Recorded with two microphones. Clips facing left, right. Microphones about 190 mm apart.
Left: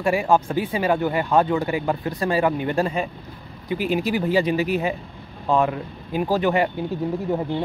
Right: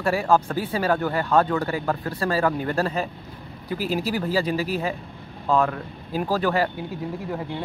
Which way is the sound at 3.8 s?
35° right (ahead or behind).